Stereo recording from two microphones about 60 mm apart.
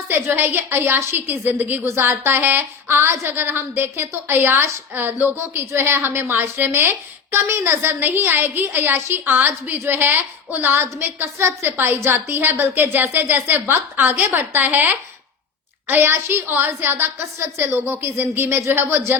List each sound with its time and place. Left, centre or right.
0.3 s a woman's voice: right
18.7 s a woman's voice: right